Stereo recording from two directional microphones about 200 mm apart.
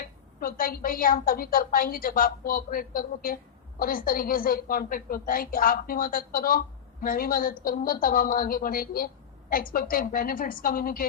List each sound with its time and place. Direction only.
0.0 s a woman's voice: 45° left (ahead or behind)